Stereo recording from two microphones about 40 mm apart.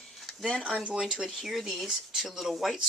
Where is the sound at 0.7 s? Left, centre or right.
Right.